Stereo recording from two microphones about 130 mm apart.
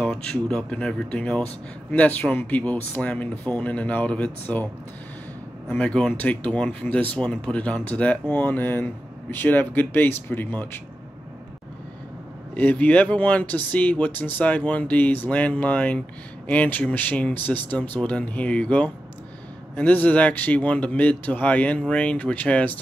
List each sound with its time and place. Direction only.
0.0 s speech: 5° left (ahead or behind)
5.7 s speech: 10° left (ahead or behind)
12.5 s speech: 10° left (ahead or behind)